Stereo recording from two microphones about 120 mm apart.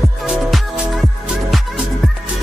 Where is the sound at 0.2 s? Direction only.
Centre (ahead or behind).